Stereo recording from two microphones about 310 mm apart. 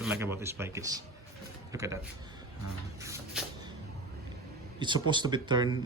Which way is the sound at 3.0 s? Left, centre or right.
Centre.